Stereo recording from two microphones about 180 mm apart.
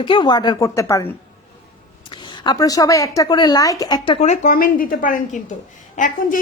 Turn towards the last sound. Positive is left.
turn(degrees=45)  # may be behind; listen again after turning